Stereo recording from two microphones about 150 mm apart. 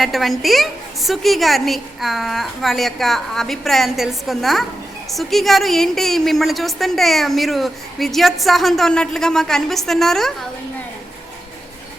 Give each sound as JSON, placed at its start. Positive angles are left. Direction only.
{"t": 0.0, "sound": "a woman's voice", "side_deg": 0}